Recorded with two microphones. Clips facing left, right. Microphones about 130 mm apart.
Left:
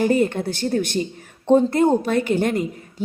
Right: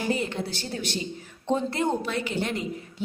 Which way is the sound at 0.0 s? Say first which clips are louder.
Left 9 dB; 50° left (ahead or behind).